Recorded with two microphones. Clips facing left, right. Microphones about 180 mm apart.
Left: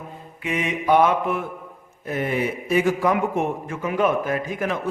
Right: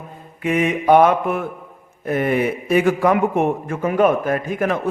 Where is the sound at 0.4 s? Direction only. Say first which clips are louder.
Right 6 dB; 50° right (ahead or behind).